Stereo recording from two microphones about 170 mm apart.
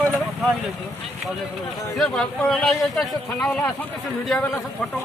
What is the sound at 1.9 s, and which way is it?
A man's voice, centre (ahead or behind).